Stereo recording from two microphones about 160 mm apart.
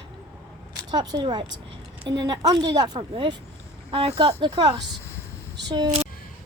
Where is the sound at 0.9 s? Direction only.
30° right (ahead or behind).